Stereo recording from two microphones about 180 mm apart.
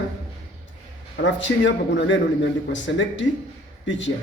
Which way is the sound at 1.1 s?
85° left.